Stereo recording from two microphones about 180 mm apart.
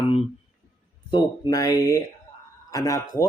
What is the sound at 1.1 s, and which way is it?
Speech, 20° left (ahead or behind).